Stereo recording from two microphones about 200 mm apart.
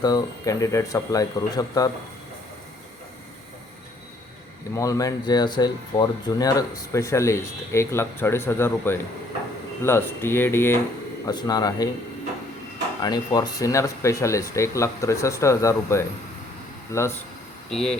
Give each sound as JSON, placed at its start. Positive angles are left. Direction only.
{"t": 0.0, "sound": "speech", "side_deg": 20}
{"t": 4.7, "sound": "speech", "side_deg": 15}
{"t": 13.0, "sound": "speech", "side_deg": 20}
{"t": 17.7, "sound": "speech", "side_deg": 0}